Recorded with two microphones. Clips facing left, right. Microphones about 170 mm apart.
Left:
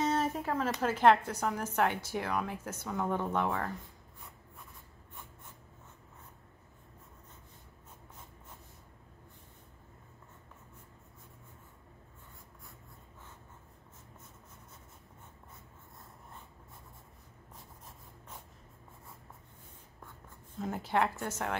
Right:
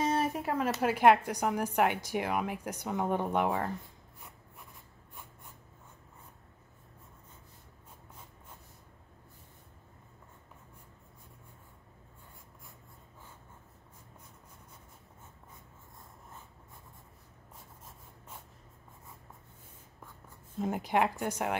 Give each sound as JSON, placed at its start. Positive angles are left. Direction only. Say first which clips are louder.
{"t": 0.1, "sound": "a sound", "louder": "right 1 dB", "side_deg": -15}
{"t": 0.7, "sound": "speech", "louder": "right 1 dB", "side_deg": -15}
{"t": 20.5, "sound": "speech", "louder": "right 2 dB", "side_deg": -20}